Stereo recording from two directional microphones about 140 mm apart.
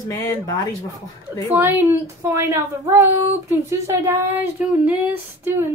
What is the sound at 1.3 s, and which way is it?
Speech, 20° right (ahead or behind).